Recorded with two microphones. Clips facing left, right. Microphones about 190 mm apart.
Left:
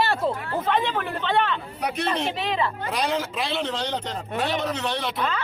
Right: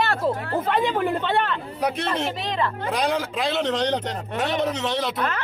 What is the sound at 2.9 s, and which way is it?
Speech, 15° right (ahead or behind).